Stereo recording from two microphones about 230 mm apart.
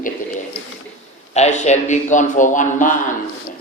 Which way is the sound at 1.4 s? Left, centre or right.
Left.